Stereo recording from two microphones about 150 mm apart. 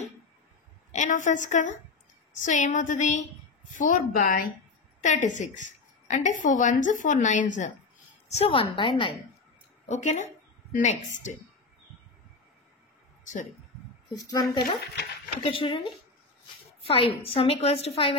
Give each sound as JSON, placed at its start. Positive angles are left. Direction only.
{"t": 0.9, "sound": "a woman's voice", "side_deg": 55}
{"t": 3.8, "sound": "a woman's voice", "side_deg": 70}
{"t": 5.0, "sound": "a woman's voice", "side_deg": 55}
{"t": 8.3, "sound": "a woman's voice", "side_deg": 40}
{"t": 9.8, "sound": "a woman's voice", "side_deg": 50}
{"t": 14.0, "sound": "a woman's voice", "side_deg": 30}